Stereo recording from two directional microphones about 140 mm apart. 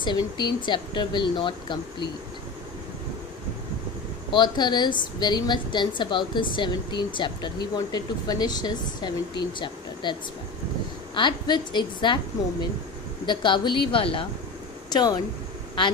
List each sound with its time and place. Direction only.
0.0 s a woman's voice: 30° left (ahead or behind)
4.3 s a woman's voice: 30° left (ahead or behind)
13.2 s a woman's voice: 35° left (ahead or behind)